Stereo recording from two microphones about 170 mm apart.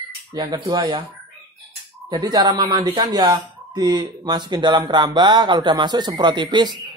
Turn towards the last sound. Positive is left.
turn(degrees=-25)  # may be behind; listen again after turning